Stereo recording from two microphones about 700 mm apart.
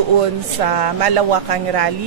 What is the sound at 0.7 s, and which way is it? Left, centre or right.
Speech, right.